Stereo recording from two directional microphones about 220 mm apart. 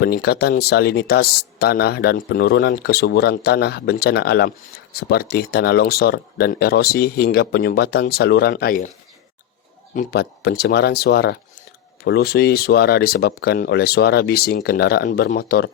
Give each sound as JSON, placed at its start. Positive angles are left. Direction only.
{"t": 0.0, "sound": "speech", "side_deg": 45}
{"t": 9.9, "sound": "speech", "side_deg": 40}